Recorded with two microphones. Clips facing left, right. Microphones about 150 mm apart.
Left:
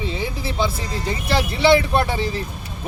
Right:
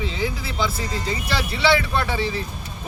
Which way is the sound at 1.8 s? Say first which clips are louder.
Left 5 dB; 25° left (ahead or behind).